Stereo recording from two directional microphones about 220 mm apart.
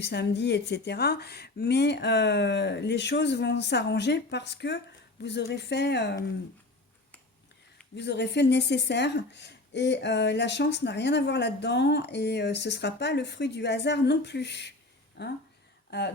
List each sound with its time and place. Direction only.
0.0 s speech: 50° left (ahead or behind)
7.9 s speech: 50° left (ahead or behind)